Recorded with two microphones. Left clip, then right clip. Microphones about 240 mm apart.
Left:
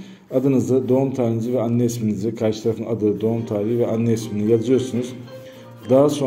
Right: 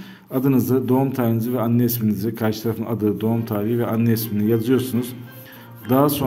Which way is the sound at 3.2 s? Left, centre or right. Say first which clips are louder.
Left 2 dB; right.